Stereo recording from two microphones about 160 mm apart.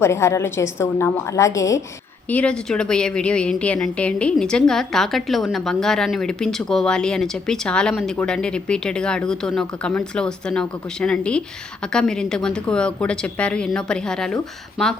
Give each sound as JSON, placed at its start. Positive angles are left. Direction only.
{"t": 0.0, "sound": "a woman's voice", "side_deg": 15}
{"t": 2.3, "sound": "a woman's voice", "side_deg": 5}